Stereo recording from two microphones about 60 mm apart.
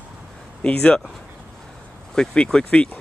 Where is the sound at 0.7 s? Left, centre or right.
Centre.